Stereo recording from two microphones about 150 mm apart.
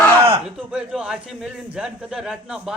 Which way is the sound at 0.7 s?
5° right (ahead or behind).